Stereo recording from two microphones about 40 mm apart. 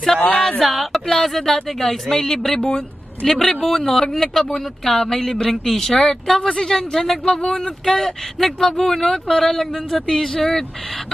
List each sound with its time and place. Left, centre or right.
0.1 s speech: centre
3.2 s speech: centre